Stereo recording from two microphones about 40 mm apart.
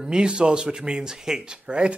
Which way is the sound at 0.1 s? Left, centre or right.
Right.